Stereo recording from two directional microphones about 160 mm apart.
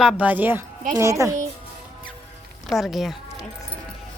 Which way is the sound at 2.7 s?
Centre (ahead or behind).